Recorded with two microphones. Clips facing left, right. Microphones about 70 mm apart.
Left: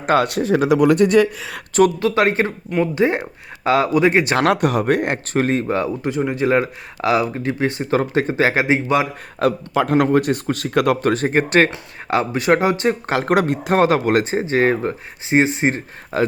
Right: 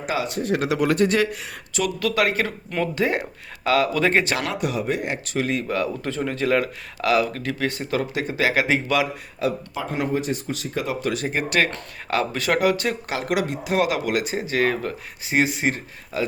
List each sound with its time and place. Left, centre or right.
0.0 s speech: left
2.0 s speech: left
4.4 s speech: left
9.4 s a man's voice: left
9.7 s speech: left
11.0 s speech: left
12.0 s speech: left
13.1 s speech: left